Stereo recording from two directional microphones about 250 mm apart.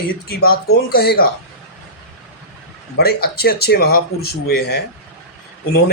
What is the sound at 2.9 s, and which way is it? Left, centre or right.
Speech, left.